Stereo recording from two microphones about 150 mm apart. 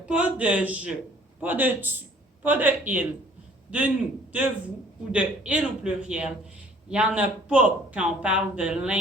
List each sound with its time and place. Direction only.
0.0 s a man's voice: 10° right (ahead or behind)